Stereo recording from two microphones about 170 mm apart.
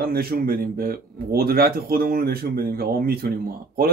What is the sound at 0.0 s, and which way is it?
Speech, 60° right (ahead or behind).